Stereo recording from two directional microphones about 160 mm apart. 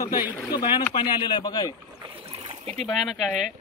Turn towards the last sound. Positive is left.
turn(degrees=-5)  # may be behind; listen again after turning